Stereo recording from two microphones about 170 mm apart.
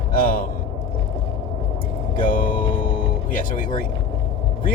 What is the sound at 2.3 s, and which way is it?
Speech, 55° left (ahead or behind).